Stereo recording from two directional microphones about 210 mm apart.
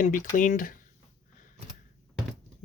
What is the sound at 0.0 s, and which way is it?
Speech, 40° left (ahead or behind).